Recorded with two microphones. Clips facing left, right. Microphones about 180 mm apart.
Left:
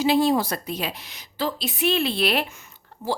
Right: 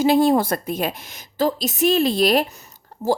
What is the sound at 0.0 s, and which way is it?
A woman's voice, 50° right (ahead or behind).